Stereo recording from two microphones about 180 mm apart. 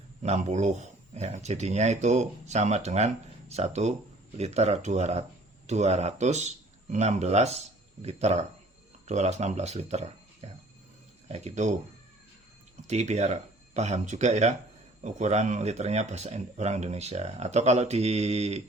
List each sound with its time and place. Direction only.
0.2 s speech: 40° right (ahead or behind)
12.9 s speech: 40° right (ahead or behind)